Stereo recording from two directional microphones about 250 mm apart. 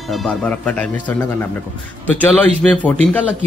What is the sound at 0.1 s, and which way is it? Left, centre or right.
Speech, centre.